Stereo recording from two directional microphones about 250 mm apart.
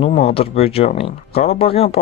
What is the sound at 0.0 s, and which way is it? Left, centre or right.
Speech, left.